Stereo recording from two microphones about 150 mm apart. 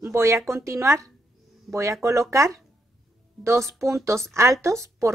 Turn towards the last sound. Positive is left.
turn(degrees=-20)  # may be behind; listen again after turning